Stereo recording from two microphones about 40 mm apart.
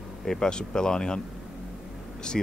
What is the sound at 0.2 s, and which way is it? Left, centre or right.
Speech, centre.